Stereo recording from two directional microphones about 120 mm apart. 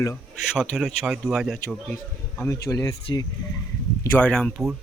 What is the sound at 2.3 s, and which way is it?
Speech, 25° left (ahead or behind).